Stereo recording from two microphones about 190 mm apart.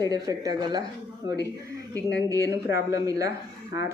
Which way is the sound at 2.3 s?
15° right (ahead or behind).